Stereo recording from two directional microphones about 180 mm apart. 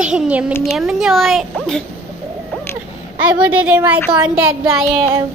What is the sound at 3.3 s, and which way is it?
A woman's voice, 10° right (ahead or behind).